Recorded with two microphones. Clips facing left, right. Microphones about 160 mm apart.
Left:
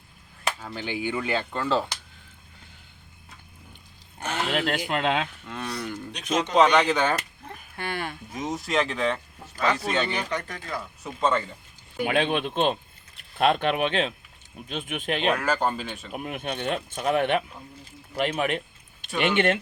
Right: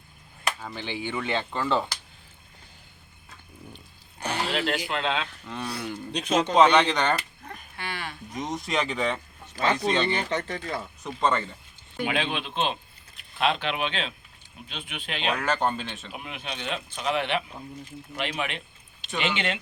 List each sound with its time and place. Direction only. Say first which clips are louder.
0.6 s speech: left 3 dB; 5° left (ahead or behind)
4.2 s a sound: even; 35° right (ahead or behind)
4.5 s speech: left 2 dB; 50° left (ahead or behind)
5.5 s speech: even; centre (ahead or behind)
6.1 s speech: right 3 dB; 30° right (ahead or behind)
6.5 s speech: even; centre (ahead or behind)
7.8 s livestock: left 4 dB; 50° left (ahead or behind)
8.3 s speech: left 1 dB; 5° left (ahead or behind)
10.2 s speech: right 2 dB; 25° right (ahead or behind)
11.2 s speech: left 1 dB; centre (ahead or behind)
12.0 s speech: left 5 dB; 50° left (ahead or behind)
15.3 s speech: even; 5° left (ahead or behind)
16.1 s speech: left 8 dB; 50° left (ahead or behind)